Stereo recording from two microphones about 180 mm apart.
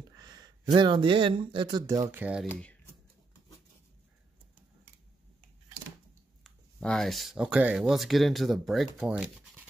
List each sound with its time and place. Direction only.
0.2 s speech: 25° right (ahead or behind); by 2.4 s 10° right (ahead or behind)
6.4 s speech: 5° left (ahead or behind)